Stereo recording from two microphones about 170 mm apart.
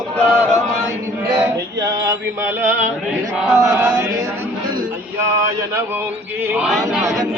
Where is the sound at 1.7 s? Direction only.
20° right (ahead or behind).